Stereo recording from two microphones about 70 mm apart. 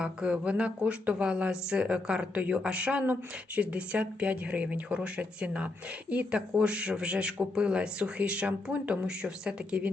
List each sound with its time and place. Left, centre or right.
0.0 s speech: centre